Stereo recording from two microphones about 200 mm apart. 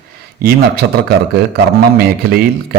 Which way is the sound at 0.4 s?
50° right (ahead or behind).